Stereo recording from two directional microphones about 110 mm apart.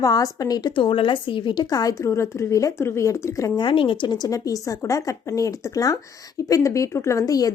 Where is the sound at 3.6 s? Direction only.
50° left (ahead or behind).